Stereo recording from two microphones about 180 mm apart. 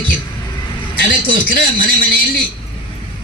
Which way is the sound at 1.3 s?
50° left (ahead or behind).